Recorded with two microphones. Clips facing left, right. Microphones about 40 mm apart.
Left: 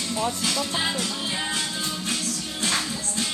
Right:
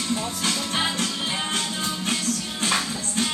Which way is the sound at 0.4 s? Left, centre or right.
Right.